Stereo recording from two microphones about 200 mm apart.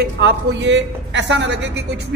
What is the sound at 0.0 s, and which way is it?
A woman's voice, 55° right (ahead or behind).